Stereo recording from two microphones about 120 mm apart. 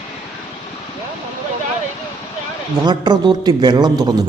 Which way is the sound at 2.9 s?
35° right (ahead or behind).